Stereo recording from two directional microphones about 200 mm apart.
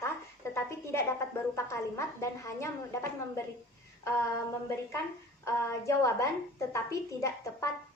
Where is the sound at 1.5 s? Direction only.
15° left (ahead or behind).